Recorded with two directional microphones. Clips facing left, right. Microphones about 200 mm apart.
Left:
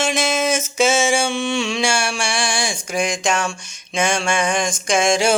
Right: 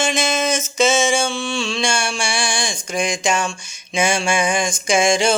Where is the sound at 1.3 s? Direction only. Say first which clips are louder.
Left 2 dB; 20° left (ahead or behind); by 5.3 s centre (ahead or behind).